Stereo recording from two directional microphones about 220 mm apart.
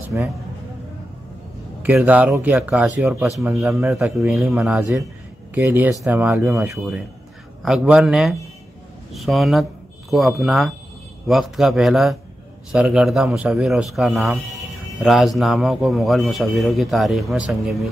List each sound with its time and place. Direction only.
0.1 s speech: 5° right (ahead or behind)
1.8 s a man's voice: 5° right (ahead or behind)
7.6 s a man's voice: centre (ahead or behind)